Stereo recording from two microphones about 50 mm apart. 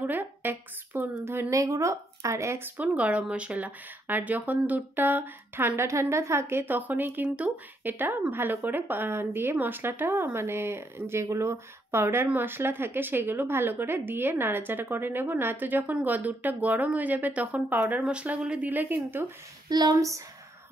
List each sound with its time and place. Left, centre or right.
0.0 s a woman's voice: right
1.5 s speech: right
3.0 s speech: right
5.8 s a woman's voice: right
6.4 s a woman's voice: right
11.2 s a woman's voice: right
18.0 s speech: right
18.6 s a woman's voice: right